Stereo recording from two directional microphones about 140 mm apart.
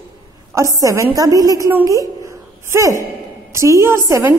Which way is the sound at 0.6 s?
25° right (ahead or behind).